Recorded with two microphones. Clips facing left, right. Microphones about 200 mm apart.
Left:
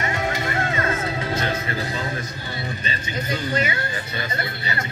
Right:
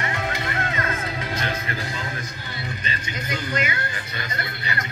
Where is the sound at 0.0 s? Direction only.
25° left (ahead or behind).